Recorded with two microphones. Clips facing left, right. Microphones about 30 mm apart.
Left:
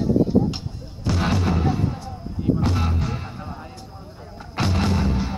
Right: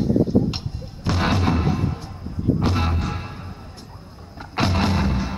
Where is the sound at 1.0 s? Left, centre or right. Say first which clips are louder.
Right 1 dB; right.